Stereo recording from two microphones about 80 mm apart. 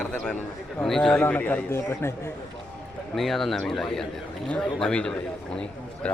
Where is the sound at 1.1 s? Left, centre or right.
Left.